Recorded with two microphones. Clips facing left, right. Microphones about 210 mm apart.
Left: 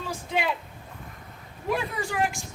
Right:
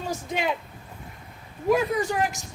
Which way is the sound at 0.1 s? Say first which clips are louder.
Left 1 dB; 45° right (ahead or behind).